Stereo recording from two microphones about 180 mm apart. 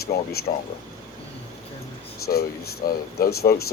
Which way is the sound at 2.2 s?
60° left (ahead or behind).